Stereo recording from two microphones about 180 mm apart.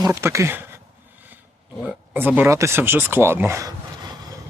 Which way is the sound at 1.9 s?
10° right (ahead or behind).